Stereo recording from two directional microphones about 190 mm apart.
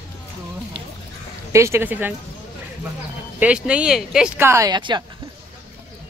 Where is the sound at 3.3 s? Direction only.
5° right (ahead or behind); by 5.0 s 20° right (ahead or behind).